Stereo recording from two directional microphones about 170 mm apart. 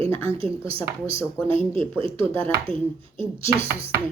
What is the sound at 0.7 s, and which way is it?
A woman's voice, 35° right (ahead or behind).